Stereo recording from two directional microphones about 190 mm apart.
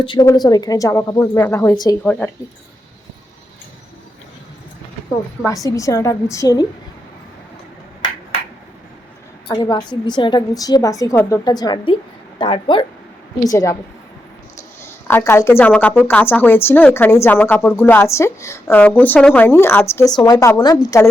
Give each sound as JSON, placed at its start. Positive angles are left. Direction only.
{"t": 0.0, "sound": "a woman's voice", "side_deg": 25}
{"t": 2.0, "sound": "speech", "side_deg": 5}
{"t": 5.5, "sound": "speech", "side_deg": 15}
{"t": 9.5, "sound": "a woman's voice", "side_deg": 20}
{"t": 14.8, "sound": "speech", "side_deg": 10}